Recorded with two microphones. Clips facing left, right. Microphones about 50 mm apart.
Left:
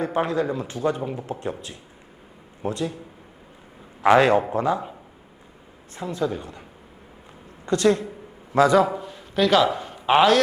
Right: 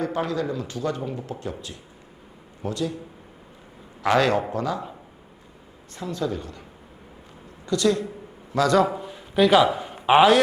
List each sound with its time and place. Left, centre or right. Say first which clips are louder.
0.0 s speech: left 2 dB; left
4.0 s speech: left 4 dB; left
5.9 s speech: left 2 dB; left
7.6 s speech: left 2 dB; left
8.7 s a man's voice: left 1 dB; centre